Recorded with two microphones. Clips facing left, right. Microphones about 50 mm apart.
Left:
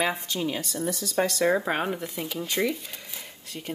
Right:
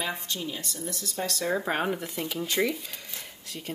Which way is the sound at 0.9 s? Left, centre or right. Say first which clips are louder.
Left 8 dB; left.